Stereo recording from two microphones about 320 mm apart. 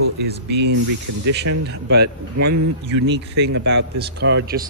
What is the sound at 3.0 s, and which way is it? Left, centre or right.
Speech, right.